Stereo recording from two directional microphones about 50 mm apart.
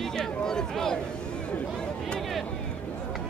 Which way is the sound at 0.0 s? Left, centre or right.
Centre.